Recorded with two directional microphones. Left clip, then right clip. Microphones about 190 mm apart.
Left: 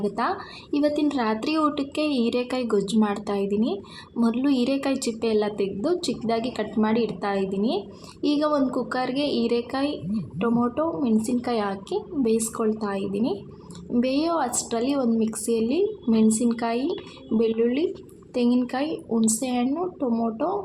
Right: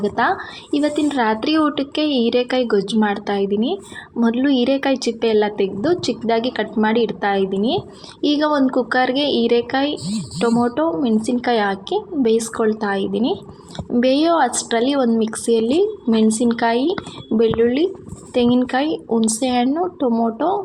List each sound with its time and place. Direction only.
0.0 s a woman's voice: 10° right (ahead or behind)